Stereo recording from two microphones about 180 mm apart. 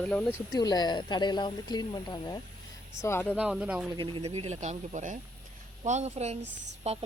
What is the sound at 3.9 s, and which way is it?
Speech, 25° right (ahead or behind).